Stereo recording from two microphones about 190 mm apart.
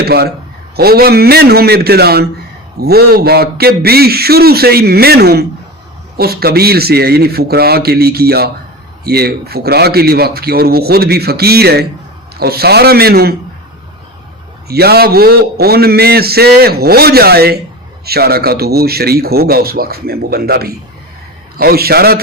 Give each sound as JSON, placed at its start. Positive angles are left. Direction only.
{"t": 0.0, "sound": "a man's voice", "side_deg": -55}
{"t": 14.7, "sound": "a man's voice", "side_deg": -55}